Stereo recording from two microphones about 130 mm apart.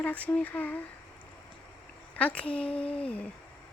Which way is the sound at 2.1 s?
10° left (ahead or behind).